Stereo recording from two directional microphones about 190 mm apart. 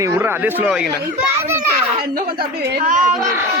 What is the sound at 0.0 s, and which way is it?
Speech, 10° right (ahead or behind).